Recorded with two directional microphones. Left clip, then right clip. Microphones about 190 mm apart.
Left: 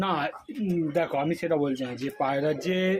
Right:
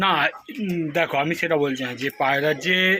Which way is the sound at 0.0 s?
Centre (ahead or behind).